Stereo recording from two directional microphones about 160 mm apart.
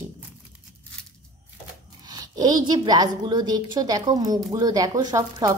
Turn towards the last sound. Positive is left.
turn(degrees=-20)  # may be behind; listen again after turning